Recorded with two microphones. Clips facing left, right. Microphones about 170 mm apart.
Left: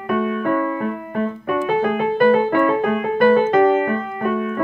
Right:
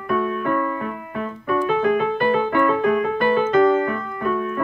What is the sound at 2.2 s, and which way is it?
Music, 40° left (ahead or behind).